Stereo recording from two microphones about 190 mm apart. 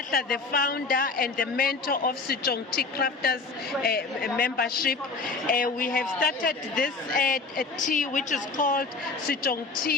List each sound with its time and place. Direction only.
0.1 s speech: 50° left (ahead or behind)